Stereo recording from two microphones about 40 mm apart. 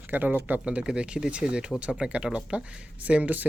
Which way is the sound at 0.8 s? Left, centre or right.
Right.